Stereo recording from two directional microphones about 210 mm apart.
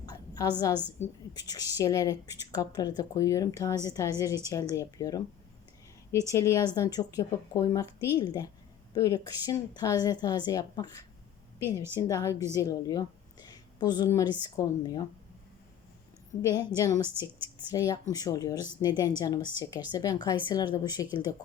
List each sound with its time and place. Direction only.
0.0 s a sound: 20° left (ahead or behind)
1.3 s a woman's voice: 20° left (ahead or behind)
6.3 s a woman's voice: 15° left (ahead or behind)
16.5 s a woman's voice: 20° left (ahead or behind)